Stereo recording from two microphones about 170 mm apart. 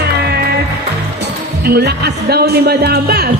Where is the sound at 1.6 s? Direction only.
70° right (ahead or behind).